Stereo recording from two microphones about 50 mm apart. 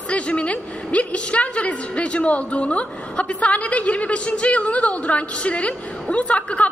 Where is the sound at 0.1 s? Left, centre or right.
Left.